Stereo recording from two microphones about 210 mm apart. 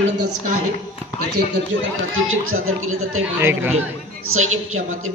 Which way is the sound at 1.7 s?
65° right (ahead or behind).